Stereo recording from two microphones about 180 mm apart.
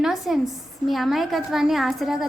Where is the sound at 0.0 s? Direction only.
Centre (ahead or behind).